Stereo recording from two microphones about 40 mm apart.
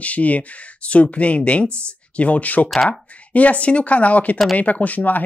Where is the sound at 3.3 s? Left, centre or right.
Left.